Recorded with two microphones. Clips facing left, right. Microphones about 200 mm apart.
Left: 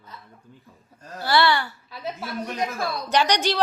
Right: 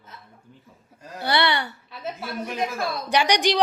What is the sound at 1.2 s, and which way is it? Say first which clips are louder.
Speech: left 2 dB; 20° right (ahead or behind).